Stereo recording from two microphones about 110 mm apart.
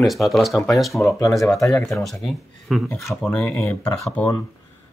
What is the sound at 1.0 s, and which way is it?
Speech, 30° left (ahead or behind).